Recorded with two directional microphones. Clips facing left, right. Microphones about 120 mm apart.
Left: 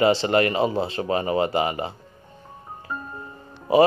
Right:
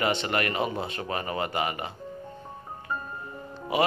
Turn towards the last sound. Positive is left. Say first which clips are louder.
# left 9 dB
turn(degrees=35)  # may be behind; listen again after turning